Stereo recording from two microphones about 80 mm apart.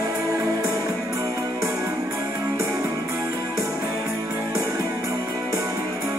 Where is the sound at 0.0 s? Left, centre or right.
Right.